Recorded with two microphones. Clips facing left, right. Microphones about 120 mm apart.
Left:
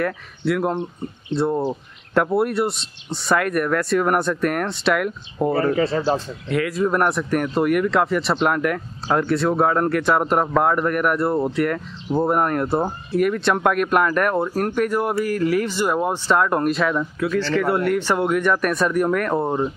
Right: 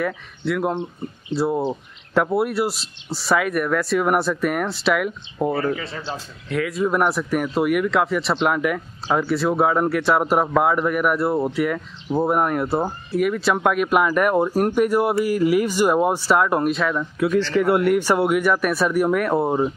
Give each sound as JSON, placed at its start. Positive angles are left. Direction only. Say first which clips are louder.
{"t": 0.0, "sound": "speech", "louder": "left 2 dB", "side_deg": 0}
{"t": 5.5, "sound": "speech", "louder": "left 7 dB", "side_deg": 30}
{"t": 6.5, "sound": "speech", "louder": "left 1 dB", "side_deg": 0}
{"t": 17.2, "sound": "speech", "louder": "right 3 dB", "side_deg": -15}